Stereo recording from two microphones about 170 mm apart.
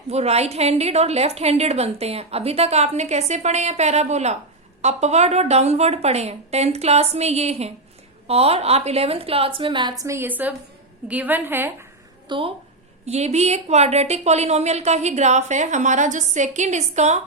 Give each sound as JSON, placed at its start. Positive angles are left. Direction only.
{"t": 0.1, "sound": "a woman's voice", "side_deg": -40}
{"t": 12.3, "sound": "a woman's voice", "side_deg": -30}